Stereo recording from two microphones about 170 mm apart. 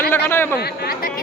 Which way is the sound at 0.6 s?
60° left (ahead or behind).